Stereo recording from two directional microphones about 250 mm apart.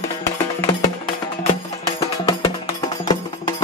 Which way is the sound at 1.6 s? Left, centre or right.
Centre.